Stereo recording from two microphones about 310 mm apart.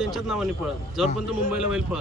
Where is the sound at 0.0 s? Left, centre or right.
Centre.